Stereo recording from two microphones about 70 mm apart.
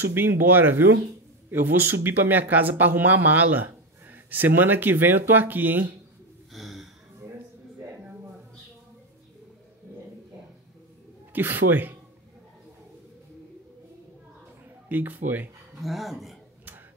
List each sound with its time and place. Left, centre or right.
0.0 s speech: right
6.5 s gasp: centre
11.3 s speech: right
14.9 s speech: right
15.8 s speech: centre